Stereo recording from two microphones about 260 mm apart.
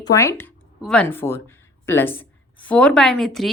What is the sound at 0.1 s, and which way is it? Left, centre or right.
A woman's voice, centre.